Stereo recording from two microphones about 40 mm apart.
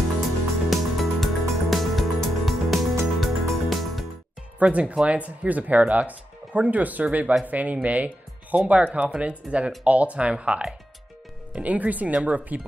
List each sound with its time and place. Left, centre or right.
0.7 s music: centre
4.6 s speech: right
11.5 s speech: right